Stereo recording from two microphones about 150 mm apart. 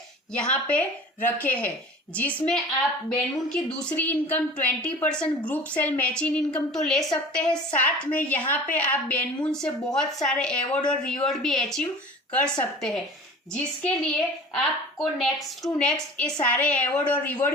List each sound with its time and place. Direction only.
0.5 s a woman's voice: 10° left (ahead or behind)
3.1 s a woman's voice: 5° left (ahead or behind)